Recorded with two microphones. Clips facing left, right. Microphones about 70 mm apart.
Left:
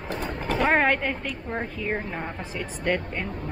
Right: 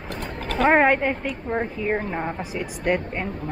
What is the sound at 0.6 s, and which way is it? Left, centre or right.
A woman's voice, centre.